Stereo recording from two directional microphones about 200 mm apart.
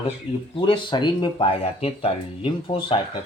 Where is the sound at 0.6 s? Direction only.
25° left (ahead or behind).